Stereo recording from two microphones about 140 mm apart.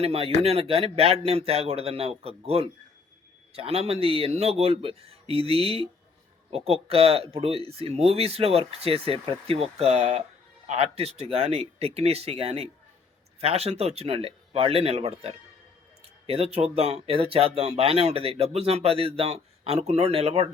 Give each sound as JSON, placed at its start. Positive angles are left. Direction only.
{"t": 0.0, "sound": "speech", "side_deg": -45}